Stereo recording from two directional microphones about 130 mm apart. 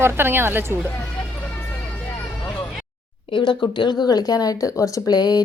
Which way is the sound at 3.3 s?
40° left (ahead or behind).